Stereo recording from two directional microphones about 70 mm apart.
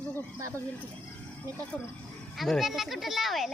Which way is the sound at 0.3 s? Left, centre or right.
Right.